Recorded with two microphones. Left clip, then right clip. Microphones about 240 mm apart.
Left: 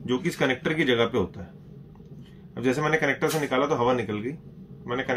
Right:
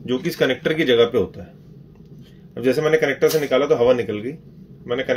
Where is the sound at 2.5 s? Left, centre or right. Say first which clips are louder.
Right 7 dB; centre.